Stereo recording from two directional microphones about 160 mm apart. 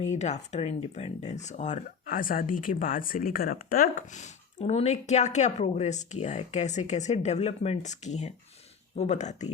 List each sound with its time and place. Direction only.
0.0 s speech: 45° left (ahead or behind)